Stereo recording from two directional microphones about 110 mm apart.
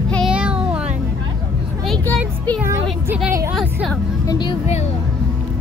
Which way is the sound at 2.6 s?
25° right (ahead or behind).